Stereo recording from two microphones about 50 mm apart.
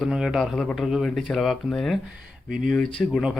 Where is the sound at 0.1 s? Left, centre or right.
Centre.